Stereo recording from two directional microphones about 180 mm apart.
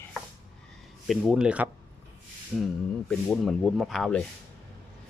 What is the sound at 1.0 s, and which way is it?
Speech, 5° right (ahead or behind).